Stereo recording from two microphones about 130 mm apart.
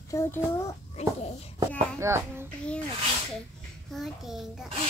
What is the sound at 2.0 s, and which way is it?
Speech, 20° right (ahead or behind).